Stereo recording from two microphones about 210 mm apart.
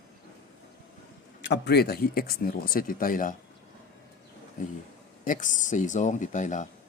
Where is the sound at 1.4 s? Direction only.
55° left (ahead or behind); by 3.3 s 40° left (ahead or behind).